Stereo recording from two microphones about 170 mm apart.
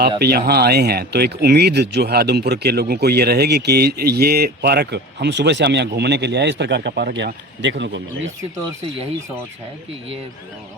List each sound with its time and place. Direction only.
0.2 s speech: 65° right (ahead or behind); by 8.3 s 90° right